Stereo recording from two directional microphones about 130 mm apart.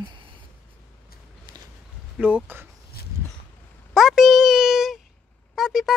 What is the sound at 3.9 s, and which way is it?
Speech, 5° right (ahead or behind).